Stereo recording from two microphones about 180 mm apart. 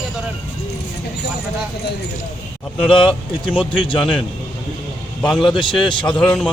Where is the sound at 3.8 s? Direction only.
25° left (ahead or behind).